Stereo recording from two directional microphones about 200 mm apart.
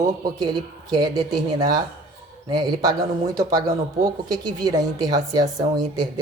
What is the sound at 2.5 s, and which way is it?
A woman's voice, 20° right (ahead or behind).